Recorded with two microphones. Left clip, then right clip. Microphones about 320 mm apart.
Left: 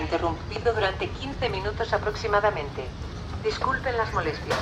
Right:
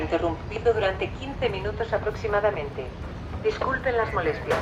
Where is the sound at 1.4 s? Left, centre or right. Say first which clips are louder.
Right 1 dB; centre.